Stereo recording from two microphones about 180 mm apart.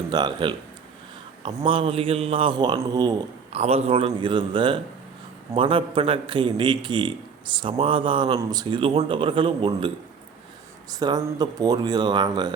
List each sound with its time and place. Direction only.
0.1 s a man's voice: 25° right (ahead or behind)
3.5 s a man's voice: 35° right (ahead or behind)